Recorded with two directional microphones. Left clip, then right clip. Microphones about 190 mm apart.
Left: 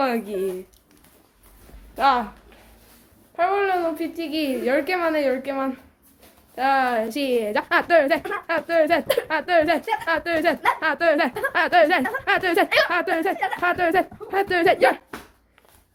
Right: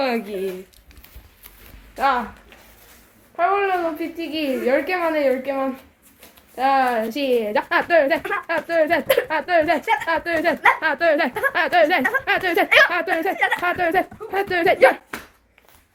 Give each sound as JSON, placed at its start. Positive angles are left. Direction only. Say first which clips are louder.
{"t": 0.0, "sound": "speech", "louder": "right 1 dB", "side_deg": 10}
{"t": 2.0, "sound": "speech", "louder": "left 1 dB", "side_deg": 25}
{"t": 3.3, "sound": "a woman's voice", "louder": "right 2 dB", "side_deg": 0}